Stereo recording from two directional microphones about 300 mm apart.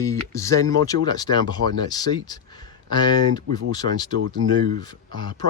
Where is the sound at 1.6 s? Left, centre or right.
Right.